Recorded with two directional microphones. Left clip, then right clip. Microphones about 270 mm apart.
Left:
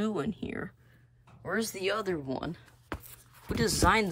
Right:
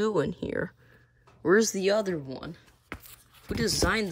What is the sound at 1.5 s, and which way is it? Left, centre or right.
Speech, centre.